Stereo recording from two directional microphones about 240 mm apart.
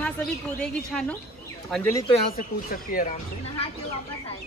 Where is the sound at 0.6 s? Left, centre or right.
Centre.